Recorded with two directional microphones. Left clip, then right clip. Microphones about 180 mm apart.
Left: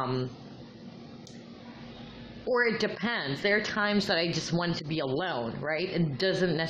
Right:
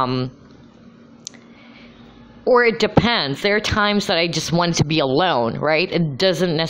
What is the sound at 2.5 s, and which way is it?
A woman's voice, 35° right (ahead or behind).